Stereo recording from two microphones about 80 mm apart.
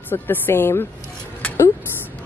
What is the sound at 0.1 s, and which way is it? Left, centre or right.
Speech, left.